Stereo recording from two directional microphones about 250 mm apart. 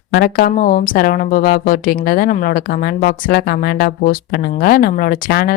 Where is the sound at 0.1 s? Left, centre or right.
Left.